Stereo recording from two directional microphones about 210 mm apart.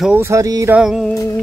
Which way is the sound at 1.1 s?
15° left (ahead or behind).